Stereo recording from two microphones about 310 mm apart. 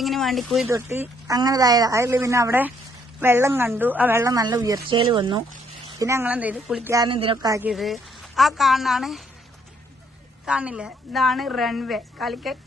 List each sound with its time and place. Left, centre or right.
0.0 s a woman's voice: centre
10.4 s speech: centre